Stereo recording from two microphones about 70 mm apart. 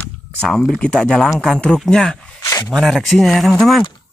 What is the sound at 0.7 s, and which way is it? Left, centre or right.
Speech, centre.